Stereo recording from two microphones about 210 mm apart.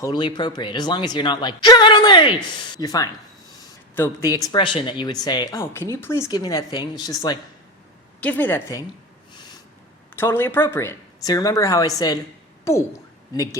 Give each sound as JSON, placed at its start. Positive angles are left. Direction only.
{"t": 0.0, "sound": "speech", "side_deg": 20}
{"t": 8.2, "sound": "speech", "side_deg": 10}
{"t": 9.3, "sound": "snort", "side_deg": 20}
{"t": 10.2, "sound": "speech", "side_deg": 10}
{"t": 13.3, "sound": "speech", "side_deg": 15}